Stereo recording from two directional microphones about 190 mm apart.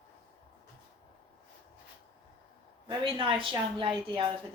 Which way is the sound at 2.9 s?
25° right (ahead or behind).